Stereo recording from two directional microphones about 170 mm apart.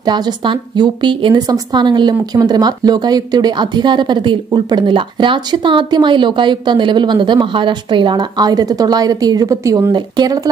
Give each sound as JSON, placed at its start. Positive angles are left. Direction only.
{"t": 0.0, "sound": "a woman's voice", "side_deg": -25}